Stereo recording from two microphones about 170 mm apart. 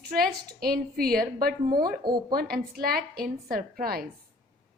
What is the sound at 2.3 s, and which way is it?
A woman's voice, 60° right (ahead or behind).